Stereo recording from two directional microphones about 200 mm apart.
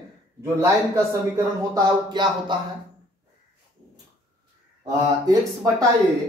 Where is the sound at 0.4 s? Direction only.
15° right (ahead or behind).